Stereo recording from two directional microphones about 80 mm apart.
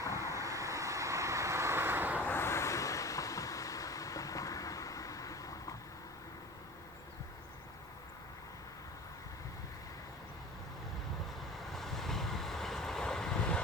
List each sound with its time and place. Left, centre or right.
0.2 s vehicle: right
2.2 s vehicle: left
11.7 s vehicle: centre